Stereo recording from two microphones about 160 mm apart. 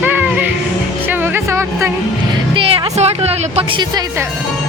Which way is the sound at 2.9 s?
40° right (ahead or behind).